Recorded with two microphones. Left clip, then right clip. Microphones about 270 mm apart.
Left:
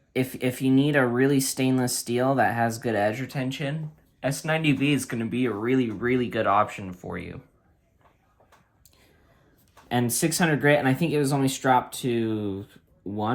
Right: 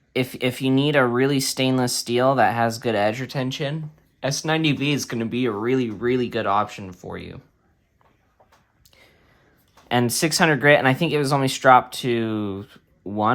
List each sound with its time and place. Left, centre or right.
0.1 s speech: centre
9.9 s speech: centre